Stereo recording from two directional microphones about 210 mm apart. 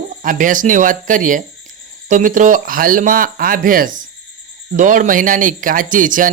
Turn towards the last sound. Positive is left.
turn(degrees=-40)  # may be behind; listen again after turning